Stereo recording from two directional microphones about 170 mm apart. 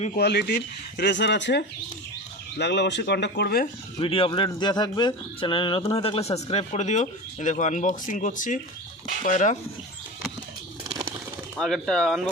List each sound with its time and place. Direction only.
0.2 s speech: 75° left (ahead or behind)
4.0 s speech: 30° left (ahead or behind); by 9.6 s 45° left (ahead or behind)
10.8 s bird: 20° right (ahead or behind)
11.5 s speech: centre (ahead or behind)